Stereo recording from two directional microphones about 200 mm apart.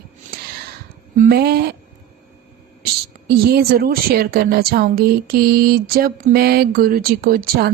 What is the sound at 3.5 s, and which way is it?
Speech, 50° right (ahead or behind).